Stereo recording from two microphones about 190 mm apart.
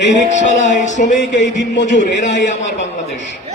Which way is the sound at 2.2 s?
70° left (ahead or behind).